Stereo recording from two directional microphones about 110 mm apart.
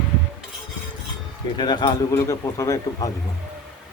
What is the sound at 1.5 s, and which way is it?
Speech, 40° left (ahead or behind).